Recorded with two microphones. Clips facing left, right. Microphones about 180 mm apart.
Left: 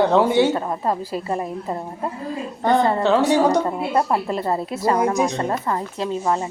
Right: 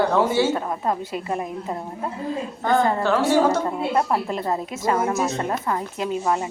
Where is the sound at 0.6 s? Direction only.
5° left (ahead or behind).